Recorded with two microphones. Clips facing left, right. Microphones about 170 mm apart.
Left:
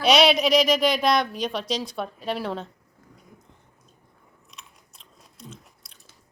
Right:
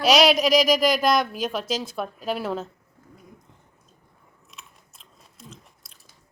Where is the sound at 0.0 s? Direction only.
Centre (ahead or behind).